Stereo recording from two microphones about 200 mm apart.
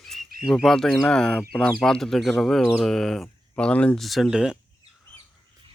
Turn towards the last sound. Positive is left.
turn(degrees=-5)  # may be behind; listen again after turning